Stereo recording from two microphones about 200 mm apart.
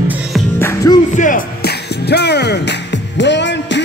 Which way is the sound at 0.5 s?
15° left (ahead or behind).